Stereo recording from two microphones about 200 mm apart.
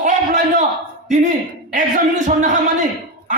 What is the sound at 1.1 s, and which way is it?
A man's voice, 40° right (ahead or behind).